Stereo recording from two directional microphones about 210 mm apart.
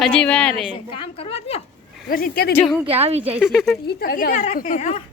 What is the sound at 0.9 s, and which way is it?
Speech, 25° left (ahead or behind).